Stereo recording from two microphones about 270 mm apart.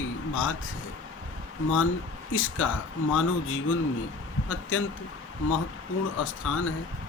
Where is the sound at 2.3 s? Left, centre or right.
Left.